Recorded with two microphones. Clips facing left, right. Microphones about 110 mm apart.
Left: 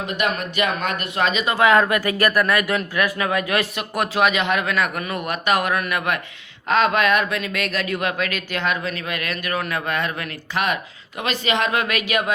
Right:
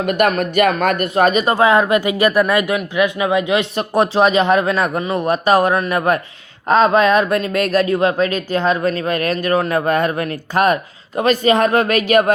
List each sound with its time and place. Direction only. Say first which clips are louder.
0.0 s speech: right 8 dB; 55° right (ahead or behind)
1.5 s a man's voice: right 3 dB; 30° right (ahead or behind); by 12.3 s 45° right (ahead or behind)